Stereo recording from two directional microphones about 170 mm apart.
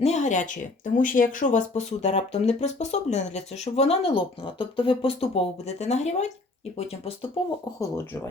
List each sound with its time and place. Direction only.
0.0 s speech: 40° left (ahead or behind)
7.8 s speech: 15° left (ahead or behind)